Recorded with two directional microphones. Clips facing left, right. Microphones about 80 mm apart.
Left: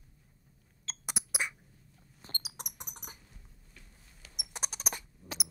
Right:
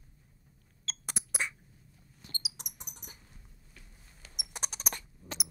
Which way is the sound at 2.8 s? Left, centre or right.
Left.